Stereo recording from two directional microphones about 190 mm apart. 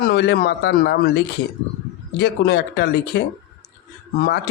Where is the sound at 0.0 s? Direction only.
60° left (ahead or behind).